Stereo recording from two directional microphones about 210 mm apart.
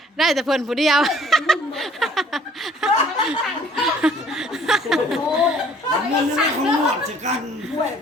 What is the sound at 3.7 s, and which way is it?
Chuckle, centre (ahead or behind).